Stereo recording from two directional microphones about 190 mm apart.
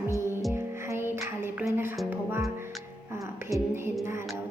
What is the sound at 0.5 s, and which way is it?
Music, 15° right (ahead or behind).